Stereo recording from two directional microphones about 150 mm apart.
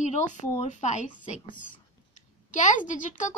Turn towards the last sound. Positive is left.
turn(degrees=55)  # may be behind; listen again after turning